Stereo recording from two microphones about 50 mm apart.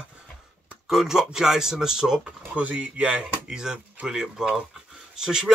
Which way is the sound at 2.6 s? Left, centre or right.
Right.